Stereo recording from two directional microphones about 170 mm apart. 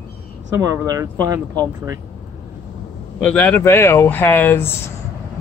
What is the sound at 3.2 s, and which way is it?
Speech, 5° left (ahead or behind).